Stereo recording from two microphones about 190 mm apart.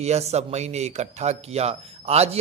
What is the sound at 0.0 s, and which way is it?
Speech, 35° right (ahead or behind).